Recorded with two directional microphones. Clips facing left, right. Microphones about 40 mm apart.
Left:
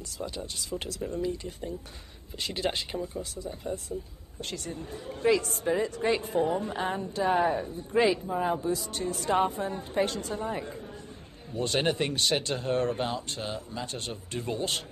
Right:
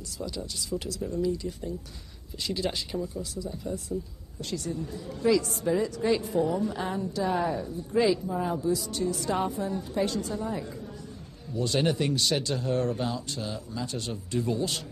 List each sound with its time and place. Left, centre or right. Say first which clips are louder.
0.2 s speech: right 1 dB; left
8.1 s speech: even; left